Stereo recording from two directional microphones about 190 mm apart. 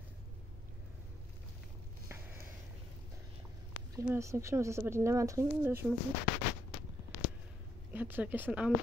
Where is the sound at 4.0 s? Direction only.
15° right (ahead or behind).